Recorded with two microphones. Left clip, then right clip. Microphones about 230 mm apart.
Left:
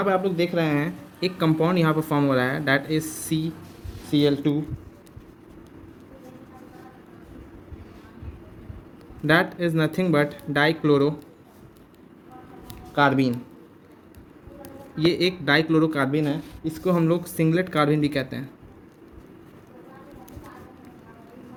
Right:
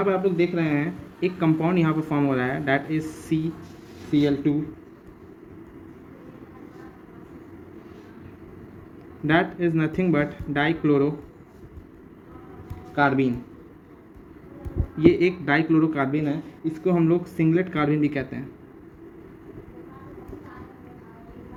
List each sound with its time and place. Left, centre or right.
0.0 s speech: left
9.2 s speech: left
12.9 s speech: left
14.9 s speech: left